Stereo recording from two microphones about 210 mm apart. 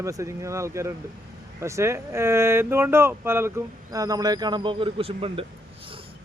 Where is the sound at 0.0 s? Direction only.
15° right (ahead or behind).